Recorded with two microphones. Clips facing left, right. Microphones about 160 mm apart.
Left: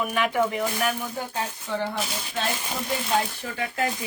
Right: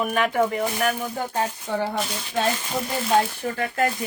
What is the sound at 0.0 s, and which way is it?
Speech, 45° right (ahead or behind).